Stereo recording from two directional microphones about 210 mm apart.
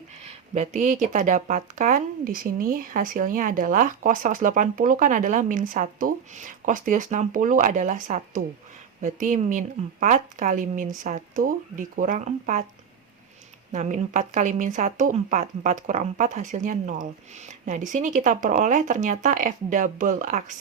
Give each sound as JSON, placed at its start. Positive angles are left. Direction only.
{"t": 0.3, "sound": "speech", "side_deg": -30}
{"t": 13.7, "sound": "speech", "side_deg": -35}